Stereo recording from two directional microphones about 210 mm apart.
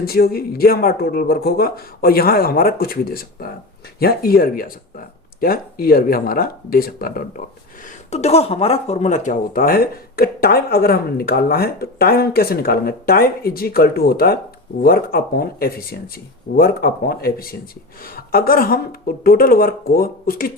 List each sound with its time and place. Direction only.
0.0 s speech: 45° left (ahead or behind)
8.1 s speech: 30° left (ahead or behind)